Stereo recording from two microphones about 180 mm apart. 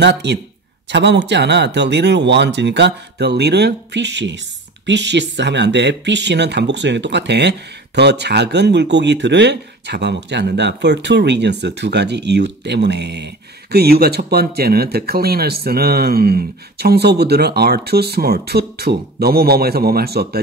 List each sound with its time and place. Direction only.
0.0 s speech: 70° right (ahead or behind)